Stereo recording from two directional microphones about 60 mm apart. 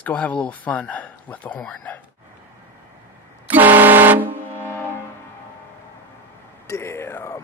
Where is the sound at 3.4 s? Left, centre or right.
Right.